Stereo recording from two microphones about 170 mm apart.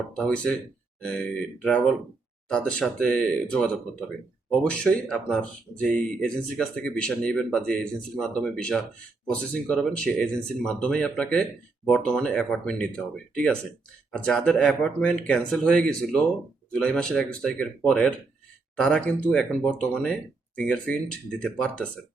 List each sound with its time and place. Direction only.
0.1 s speech: 5° left (ahead or behind)